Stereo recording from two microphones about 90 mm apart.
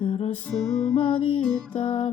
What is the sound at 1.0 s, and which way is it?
Music, 85° left.